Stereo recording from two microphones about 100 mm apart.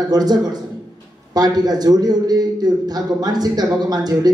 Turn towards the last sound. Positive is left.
turn(degrees=-40)  # may be behind; listen again after turning